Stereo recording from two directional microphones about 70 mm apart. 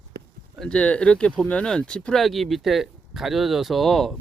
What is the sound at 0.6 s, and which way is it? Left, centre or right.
Speech, centre.